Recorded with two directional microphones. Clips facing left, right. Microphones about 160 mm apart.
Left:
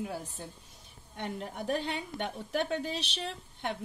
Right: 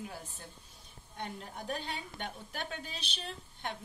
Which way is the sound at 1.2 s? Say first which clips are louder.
Left 5 dB; 75° left (ahead or behind).